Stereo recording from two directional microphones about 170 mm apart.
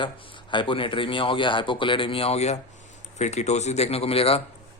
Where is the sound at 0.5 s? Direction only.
30° left (ahead or behind).